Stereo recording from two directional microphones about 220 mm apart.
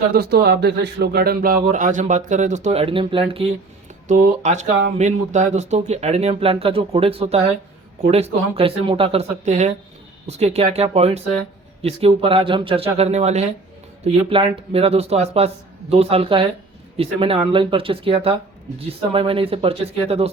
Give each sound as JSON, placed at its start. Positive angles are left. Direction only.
{"t": 0.1, "sound": "speech", "side_deg": -45}